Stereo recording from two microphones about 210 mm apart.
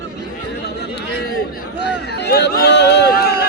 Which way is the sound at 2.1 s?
50° left (ahead or behind).